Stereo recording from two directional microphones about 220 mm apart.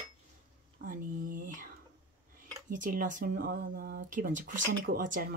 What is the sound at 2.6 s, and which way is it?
Speech, 35° right (ahead or behind).